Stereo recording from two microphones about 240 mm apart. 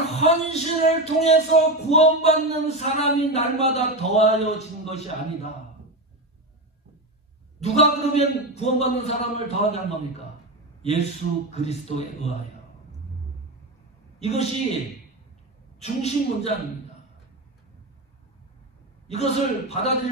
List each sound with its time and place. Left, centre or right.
0.1 s speech: left
7.6 s speech: left
10.8 s speech: left
14.2 s speech: left
15.8 s speech: left
19.0 s speech: left